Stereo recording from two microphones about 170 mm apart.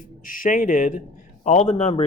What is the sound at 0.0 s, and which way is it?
Speech, 55° left (ahead or behind).